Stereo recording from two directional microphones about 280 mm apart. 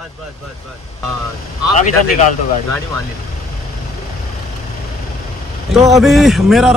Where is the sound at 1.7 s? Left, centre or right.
Left.